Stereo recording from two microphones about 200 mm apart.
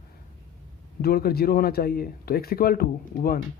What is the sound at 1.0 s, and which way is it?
Speech, 50° left (ahead or behind).